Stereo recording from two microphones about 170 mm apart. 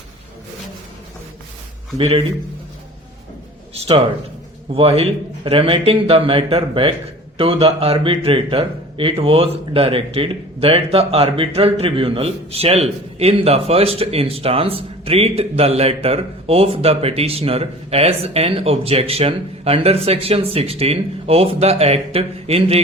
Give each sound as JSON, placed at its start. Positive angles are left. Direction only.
{"t": 2.0, "sound": "a man's voice", "side_deg": -35}
{"t": 3.8, "sound": "a man's voice", "side_deg": -35}